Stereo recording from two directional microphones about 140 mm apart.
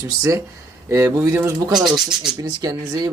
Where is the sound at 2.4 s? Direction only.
25° right (ahead or behind).